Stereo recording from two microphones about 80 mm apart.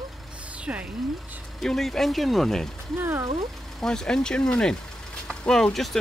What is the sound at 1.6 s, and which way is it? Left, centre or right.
Speech, centre.